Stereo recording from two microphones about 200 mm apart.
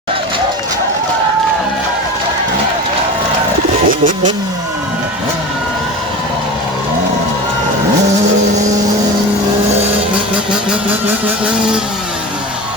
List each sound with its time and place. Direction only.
3.8 s bird: 40° right (ahead or behind)
11.4 s vehicle: 5° right (ahead or behind)